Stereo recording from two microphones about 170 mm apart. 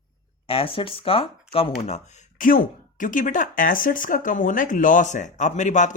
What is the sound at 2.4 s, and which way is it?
Speech, 50° left (ahead or behind).